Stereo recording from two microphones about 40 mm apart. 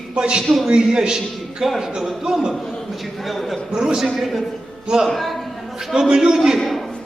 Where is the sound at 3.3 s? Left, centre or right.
Centre.